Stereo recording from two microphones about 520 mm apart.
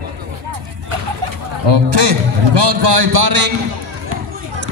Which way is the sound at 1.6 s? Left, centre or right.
Right.